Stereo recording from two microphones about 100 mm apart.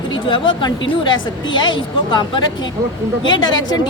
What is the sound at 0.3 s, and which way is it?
A woman's voice, 50° left (ahead or behind).